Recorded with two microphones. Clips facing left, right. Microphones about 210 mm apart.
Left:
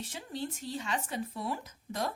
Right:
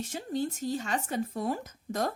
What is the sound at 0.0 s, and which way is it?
Speech, 45° right (ahead or behind).